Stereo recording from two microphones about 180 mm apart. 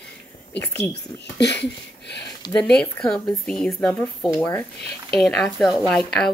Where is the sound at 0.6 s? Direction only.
10° left (ahead or behind).